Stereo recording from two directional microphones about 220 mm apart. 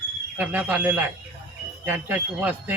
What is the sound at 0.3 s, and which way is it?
A man's voice, 5° right (ahead or behind).